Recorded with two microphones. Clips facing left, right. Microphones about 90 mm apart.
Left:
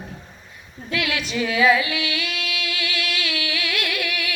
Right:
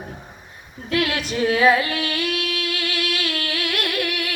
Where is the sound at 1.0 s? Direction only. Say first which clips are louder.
Right 2 dB; 45° right (ahead or behind).